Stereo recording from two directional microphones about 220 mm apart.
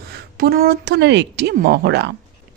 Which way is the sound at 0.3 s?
45° right (ahead or behind).